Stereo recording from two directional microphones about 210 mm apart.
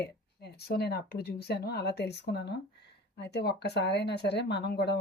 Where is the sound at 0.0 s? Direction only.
50° left (ahead or behind).